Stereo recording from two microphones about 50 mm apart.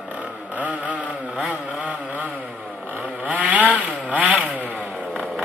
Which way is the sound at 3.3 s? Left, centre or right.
Right.